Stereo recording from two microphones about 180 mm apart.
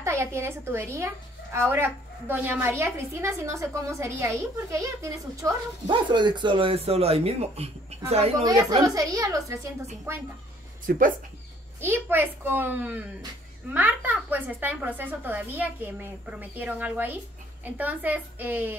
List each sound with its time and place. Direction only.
0.0 s a woman's voice: 15° right (ahead or behind); by 8.1 s 35° right (ahead or behind)
8.4 s a woman's voice: 20° right (ahead or behind)
10.9 s speech: 55° right (ahead or behind)
11.8 s a woman's voice: 10° right (ahead or behind)